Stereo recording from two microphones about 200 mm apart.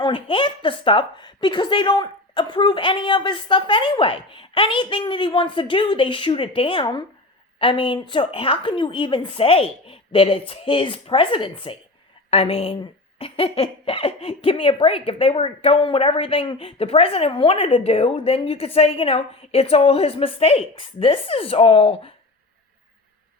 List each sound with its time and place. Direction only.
0.0 s speech: 25° left (ahead or behind)